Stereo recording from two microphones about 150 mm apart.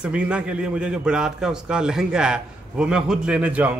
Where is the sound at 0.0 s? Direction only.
5° right (ahead or behind).